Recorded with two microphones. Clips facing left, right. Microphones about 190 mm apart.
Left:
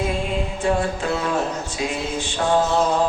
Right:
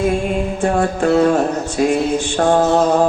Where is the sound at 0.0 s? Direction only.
50° right (ahead or behind).